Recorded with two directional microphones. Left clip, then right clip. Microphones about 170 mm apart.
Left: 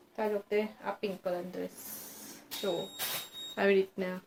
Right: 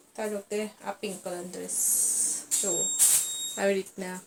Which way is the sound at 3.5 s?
10° left (ahead or behind).